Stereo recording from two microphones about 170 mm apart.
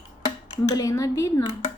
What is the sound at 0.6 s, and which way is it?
Speech, 20° left (ahead or behind).